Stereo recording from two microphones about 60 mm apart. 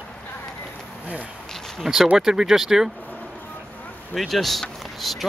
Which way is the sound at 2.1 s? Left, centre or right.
Centre.